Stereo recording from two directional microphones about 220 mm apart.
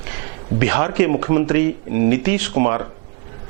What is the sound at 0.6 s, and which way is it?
Speech, 15° right (ahead or behind).